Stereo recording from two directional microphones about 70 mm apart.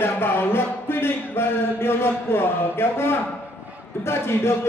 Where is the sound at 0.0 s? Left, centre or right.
Left.